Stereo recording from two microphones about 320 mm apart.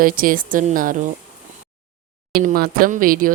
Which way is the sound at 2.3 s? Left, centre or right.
Right.